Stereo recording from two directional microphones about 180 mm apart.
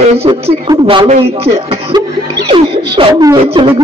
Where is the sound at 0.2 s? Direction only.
35° right (ahead or behind).